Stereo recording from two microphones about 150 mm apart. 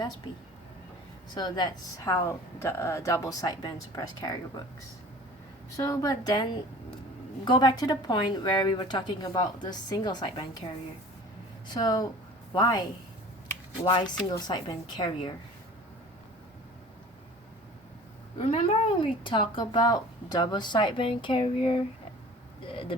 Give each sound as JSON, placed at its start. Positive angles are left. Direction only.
{"t": 1.4, "sound": "speech", "side_deg": 30}
{"t": 5.7, "sound": "speech", "side_deg": 25}
{"t": 11.7, "sound": "speech", "side_deg": 25}
{"t": 13.8, "sound": "speech", "side_deg": 30}
{"t": 18.3, "sound": "speech", "side_deg": 45}
{"t": 19.2, "sound": "speech", "side_deg": 35}
{"t": 22.6, "sound": "vehicle", "side_deg": 35}